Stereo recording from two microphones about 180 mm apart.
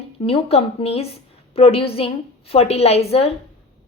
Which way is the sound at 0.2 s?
30° left (ahead or behind).